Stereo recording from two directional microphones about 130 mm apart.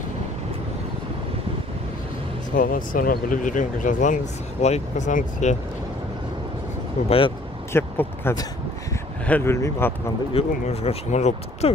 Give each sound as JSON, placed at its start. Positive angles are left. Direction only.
{"t": 2.5, "sound": "speech", "side_deg": 90}
{"t": 7.1, "sound": "speech", "side_deg": 45}
{"t": 7.7, "sound": "speech", "side_deg": 15}
{"t": 10.3, "sound": "speech", "side_deg": 50}